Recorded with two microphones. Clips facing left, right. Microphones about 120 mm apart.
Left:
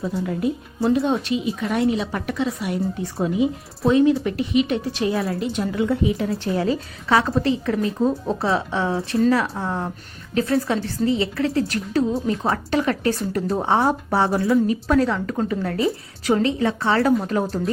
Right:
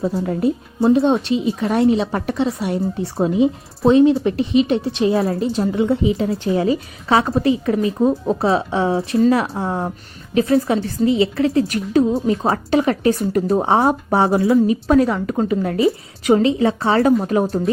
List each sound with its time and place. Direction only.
0.0 s a woman's voice: 30° right (ahead or behind)